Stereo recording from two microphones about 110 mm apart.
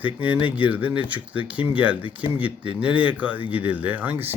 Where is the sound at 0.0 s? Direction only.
15° right (ahead or behind).